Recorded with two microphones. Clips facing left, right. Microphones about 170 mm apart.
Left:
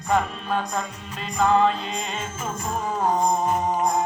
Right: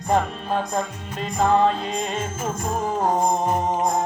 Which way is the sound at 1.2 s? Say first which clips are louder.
Right 1 dB; 40° right (ahead or behind).